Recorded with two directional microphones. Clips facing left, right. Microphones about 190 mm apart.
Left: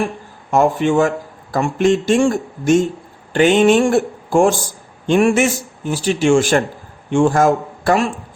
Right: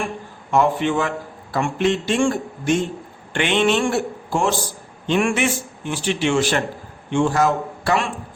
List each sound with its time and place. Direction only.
0.5 s a man's voice: 45° left (ahead or behind)